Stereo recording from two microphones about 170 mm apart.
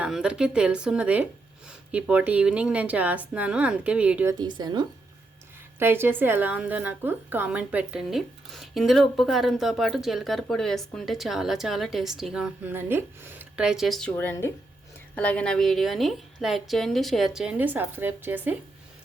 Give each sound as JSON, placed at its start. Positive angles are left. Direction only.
{"t": 0.0, "sound": "speech", "side_deg": -5}
{"t": 4.4, "sound": "a woman's voice", "side_deg": -25}
{"t": 5.8, "sound": "a woman's voice", "side_deg": -15}